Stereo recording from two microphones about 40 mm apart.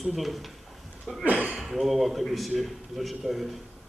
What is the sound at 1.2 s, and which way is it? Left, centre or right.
Speech, right.